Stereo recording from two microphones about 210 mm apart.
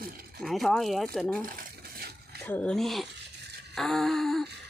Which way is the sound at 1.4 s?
45° right (ahead or behind).